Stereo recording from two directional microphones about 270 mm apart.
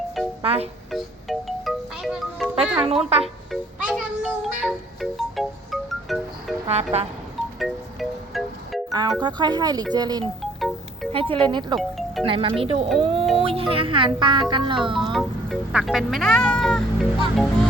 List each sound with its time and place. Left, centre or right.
0.4 s speech: right
0.9 s music: centre
2.8 s speech: right
3.5 s music: centre
6.9 s speech: right
7.6 s music: centre
8.9 s speech: centre
10.4 s music: centre
11.1 s speech: centre
11.8 s music: centre
12.2 s speech: centre
15.1 s speech: centre